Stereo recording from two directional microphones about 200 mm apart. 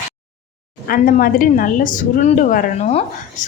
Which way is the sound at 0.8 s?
45° left (ahead or behind).